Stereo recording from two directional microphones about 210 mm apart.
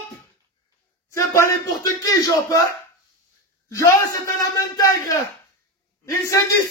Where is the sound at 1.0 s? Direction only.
15° left (ahead or behind).